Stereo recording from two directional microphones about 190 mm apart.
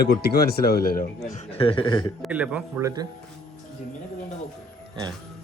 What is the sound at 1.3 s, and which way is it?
Speech, 30° left (ahead or behind).